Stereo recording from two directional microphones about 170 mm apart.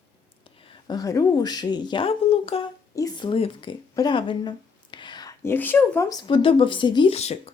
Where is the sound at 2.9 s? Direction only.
25° left (ahead or behind).